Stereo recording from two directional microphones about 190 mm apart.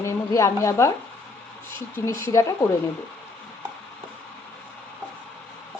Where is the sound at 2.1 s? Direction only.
15° left (ahead or behind).